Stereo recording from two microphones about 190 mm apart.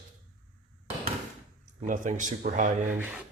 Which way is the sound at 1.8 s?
45° right (ahead or behind).